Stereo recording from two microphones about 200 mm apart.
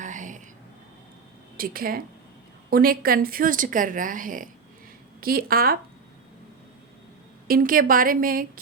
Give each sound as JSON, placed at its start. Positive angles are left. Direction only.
{"t": 0.0, "sound": "a sound", "side_deg": -40}
{"t": 1.5, "sound": "a woman's voice", "side_deg": -45}
{"t": 7.4, "sound": "a woman's voice", "side_deg": -45}